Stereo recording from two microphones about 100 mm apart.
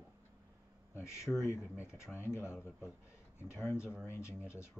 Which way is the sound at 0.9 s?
30° left (ahead or behind).